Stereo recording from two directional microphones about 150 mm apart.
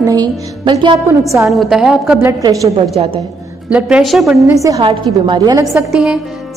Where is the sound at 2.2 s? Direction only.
20° right (ahead or behind).